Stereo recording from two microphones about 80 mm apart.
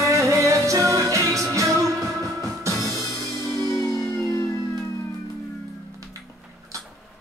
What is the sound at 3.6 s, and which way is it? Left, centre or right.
Music, left.